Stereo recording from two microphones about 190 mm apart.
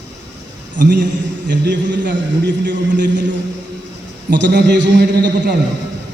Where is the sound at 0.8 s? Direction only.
60° right (ahead or behind).